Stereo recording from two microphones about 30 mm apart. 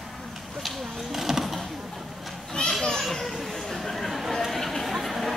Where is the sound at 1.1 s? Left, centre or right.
Centre.